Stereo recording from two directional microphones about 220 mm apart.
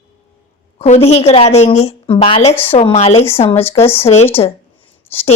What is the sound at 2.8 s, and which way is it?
A woman's voice, 25° left (ahead or behind).